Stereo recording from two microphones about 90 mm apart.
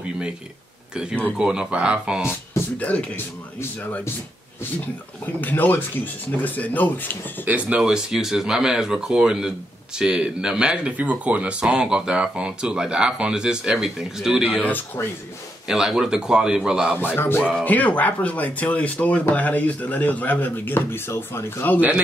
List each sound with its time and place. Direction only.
1.4 s speech: 10° right (ahead or behind)
2.8 s speech: 15° left (ahead or behind)
5.2 s speech: 20° left (ahead or behind)
7.4 s speech: 15° right (ahead or behind)
14.6 s speech: 20° left (ahead or behind)
15.7 s speech: 5° right (ahead or behind)
17.0 s speech: 25° left (ahead or behind)
21.7 s speech: 15° right (ahead or behind)